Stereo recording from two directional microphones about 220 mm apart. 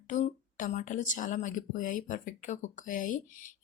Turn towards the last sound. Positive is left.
turn(degrees=35)  # may be behind; listen again after turning